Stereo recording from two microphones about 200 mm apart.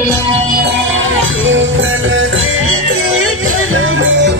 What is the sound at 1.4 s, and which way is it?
Music, 75° right (ahead or behind).